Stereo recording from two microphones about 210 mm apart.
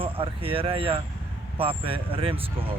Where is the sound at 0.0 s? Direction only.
25° right (ahead or behind).